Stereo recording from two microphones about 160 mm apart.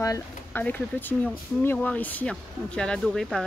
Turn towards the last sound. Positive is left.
turn(degrees=0)  # may be behind; listen again after turning